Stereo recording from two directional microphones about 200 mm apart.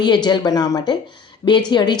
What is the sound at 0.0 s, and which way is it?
Speech, 20° left (ahead or behind).